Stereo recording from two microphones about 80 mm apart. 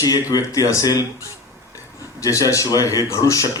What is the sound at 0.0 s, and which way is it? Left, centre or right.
Speech, left.